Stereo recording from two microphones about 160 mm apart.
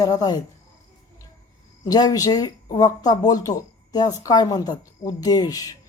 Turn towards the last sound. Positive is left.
turn(degrees=25)  # may be behind; listen again after turning